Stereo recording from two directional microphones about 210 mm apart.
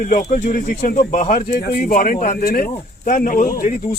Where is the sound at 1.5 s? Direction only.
45° left (ahead or behind).